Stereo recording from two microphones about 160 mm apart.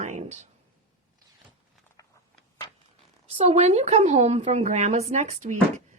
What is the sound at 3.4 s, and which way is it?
A woman's voice, 40° right (ahead or behind).